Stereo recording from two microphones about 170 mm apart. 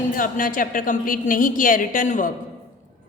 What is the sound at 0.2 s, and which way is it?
A woman's voice, 55° left (ahead or behind).